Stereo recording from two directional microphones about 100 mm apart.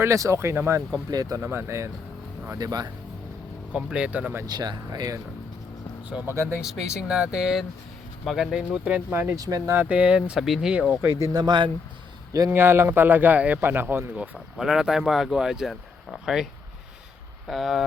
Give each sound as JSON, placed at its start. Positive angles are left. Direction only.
{"t": 0.0, "sound": "a man's voice", "side_deg": -30}
{"t": 1.1, "sound": "speech", "side_deg": -40}
{"t": 1.4, "sound": "a man's voice", "side_deg": -25}
{"t": 2.5, "sound": "speech", "side_deg": -40}
{"t": 3.7, "sound": "speech", "side_deg": -10}
{"t": 4.4, "sound": "speech", "side_deg": -45}
{"t": 6.2, "sound": "a man's voice", "side_deg": -25}
{"t": 6.6, "sound": "speech", "side_deg": -5}
{"t": 9.4, "sound": "speech", "side_deg": -40}
{"t": 9.7, "sound": "speech", "side_deg": -15}
{"t": 11.2, "sound": "speech", "side_deg": -45}
{"t": 12.5, "sound": "a man's voice", "side_deg": -25}
{"t": 14.5, "sound": "speech", "side_deg": -5}
{"t": 17.5, "sound": "speech", "side_deg": 0}